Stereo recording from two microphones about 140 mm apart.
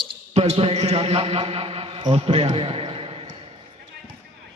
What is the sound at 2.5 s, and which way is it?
Basketball bounce, 40° right (ahead or behind).